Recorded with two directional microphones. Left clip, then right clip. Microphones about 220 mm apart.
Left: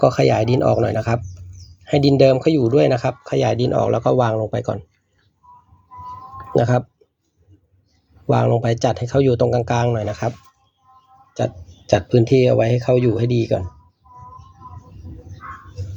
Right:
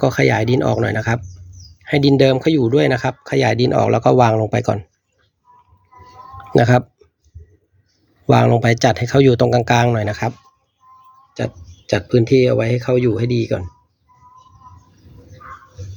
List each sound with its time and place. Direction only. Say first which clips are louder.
0.0 s speech: left 1 dB; 25° right (ahead or behind); by 4.8 s 45° right (ahead or behind)
8.3 s speech: right 4 dB; 45° right (ahead or behind)
11.3 s speech: left 2 dB; 15° right (ahead or behind)